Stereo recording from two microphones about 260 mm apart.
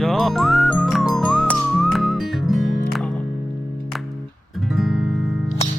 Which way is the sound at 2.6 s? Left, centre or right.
Left.